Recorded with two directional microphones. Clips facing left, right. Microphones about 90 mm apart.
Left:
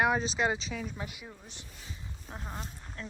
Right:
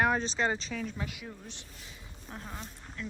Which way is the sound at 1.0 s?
20° left (ahead or behind).